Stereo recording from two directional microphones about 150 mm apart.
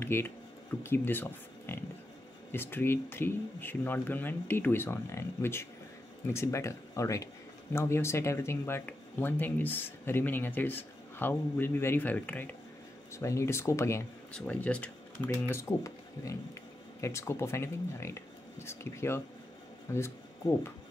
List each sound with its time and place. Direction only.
0.0 s speech: 15° left (ahead or behind)
14.3 s speech: 10° left (ahead or behind)